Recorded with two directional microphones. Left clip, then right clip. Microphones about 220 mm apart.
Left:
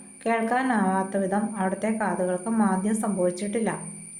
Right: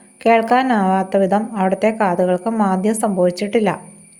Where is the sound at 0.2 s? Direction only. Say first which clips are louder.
Right 11 dB; 35° right (ahead or behind).